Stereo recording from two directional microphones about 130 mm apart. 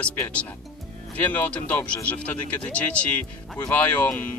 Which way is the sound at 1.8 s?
15° left (ahead or behind).